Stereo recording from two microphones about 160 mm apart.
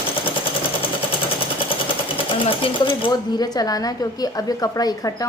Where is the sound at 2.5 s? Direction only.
30° left (ahead or behind).